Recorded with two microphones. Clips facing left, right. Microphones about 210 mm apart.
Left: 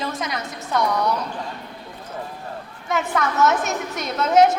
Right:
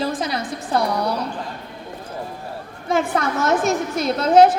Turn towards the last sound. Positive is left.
turn(degrees=-30)  # may be behind; listen again after turning